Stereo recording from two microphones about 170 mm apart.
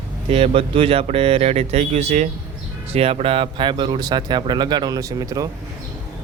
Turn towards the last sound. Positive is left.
turn(degrees=-20)  # may be behind; listen again after turning